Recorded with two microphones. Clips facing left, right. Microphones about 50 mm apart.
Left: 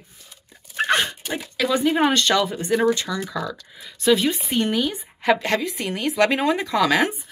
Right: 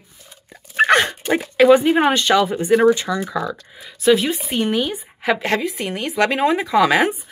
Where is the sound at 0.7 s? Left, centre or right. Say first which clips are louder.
Right 6 dB; right.